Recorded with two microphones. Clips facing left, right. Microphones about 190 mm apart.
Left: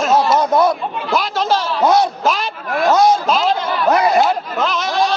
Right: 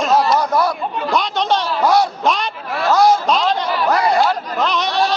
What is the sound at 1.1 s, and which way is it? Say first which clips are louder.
Speech: left 1 dB; 5° left (ahead or behind).